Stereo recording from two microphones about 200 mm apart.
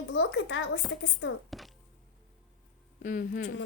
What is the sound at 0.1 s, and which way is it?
Speech, 70° left (ahead or behind).